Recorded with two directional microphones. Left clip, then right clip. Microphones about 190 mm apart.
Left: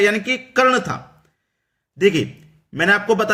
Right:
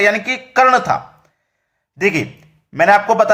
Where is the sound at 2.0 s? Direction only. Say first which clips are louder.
Even; 15° left (ahead or behind).